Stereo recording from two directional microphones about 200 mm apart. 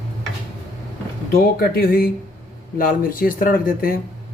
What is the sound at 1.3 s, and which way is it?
Speech, 50° left (ahead or behind).